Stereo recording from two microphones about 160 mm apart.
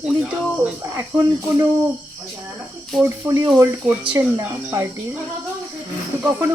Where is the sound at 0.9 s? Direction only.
15° right (ahead or behind).